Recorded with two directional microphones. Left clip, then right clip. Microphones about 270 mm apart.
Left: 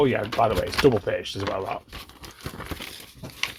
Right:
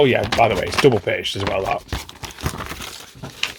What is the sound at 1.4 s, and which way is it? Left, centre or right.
Speech, right.